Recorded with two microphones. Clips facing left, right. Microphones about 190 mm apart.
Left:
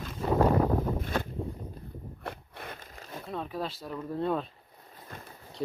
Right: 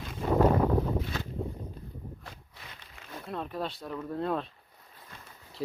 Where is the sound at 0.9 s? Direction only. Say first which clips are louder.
Left 1 dB; 50° left (ahead or behind).